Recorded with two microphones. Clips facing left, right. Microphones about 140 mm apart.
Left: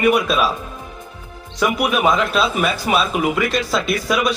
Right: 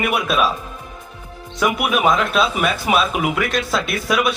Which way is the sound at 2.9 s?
15° right (ahead or behind).